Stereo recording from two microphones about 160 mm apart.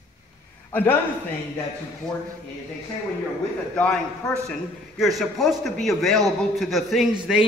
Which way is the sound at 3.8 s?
5° left (ahead or behind).